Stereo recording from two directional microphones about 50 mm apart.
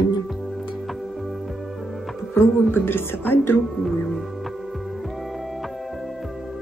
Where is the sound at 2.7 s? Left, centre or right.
Left.